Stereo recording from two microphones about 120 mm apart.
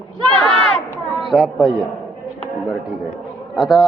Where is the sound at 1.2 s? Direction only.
Centre (ahead or behind).